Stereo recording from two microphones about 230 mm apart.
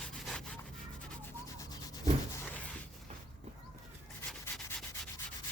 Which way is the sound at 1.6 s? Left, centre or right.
Centre.